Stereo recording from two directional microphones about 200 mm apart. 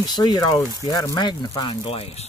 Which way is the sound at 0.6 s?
20° right (ahead or behind).